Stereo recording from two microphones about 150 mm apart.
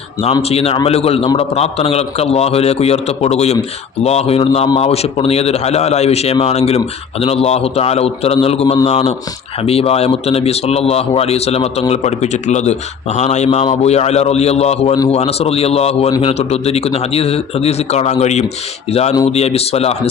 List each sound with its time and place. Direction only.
0.4 s a man's voice: 45° left (ahead or behind)